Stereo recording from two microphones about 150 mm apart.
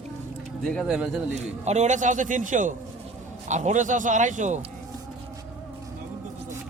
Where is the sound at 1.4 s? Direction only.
50° right (ahead or behind).